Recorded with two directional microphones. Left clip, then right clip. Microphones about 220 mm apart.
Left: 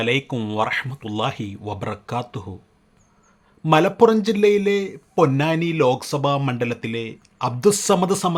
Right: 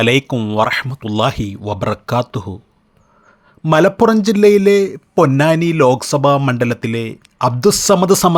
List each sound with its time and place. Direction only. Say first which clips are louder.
0.0 s a man's voice: right 8 dB; 30° right (ahead or behind)
0.3 s speech: right 7 dB; 15° right (ahead or behind)
0.6 s a man's voice: right 7 dB; 25° right (ahead or behind)
3.6 s a man's voice: right 4 dB; 25° right (ahead or behind)